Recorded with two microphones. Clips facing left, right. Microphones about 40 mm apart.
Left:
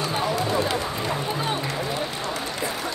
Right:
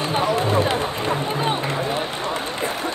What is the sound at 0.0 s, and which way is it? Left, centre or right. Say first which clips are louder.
Run: right 4 dB; right.